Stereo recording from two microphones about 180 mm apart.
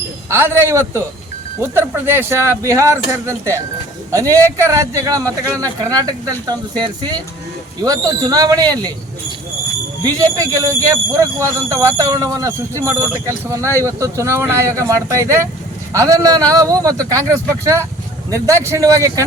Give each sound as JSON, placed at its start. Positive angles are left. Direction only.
{"t": 0.3, "sound": "a man's voice", "side_deg": -15}
{"t": 10.0, "sound": "a man's voice", "side_deg": -20}